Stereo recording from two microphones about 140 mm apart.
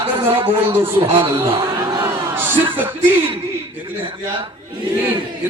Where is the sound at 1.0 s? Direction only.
35° right (ahead or behind).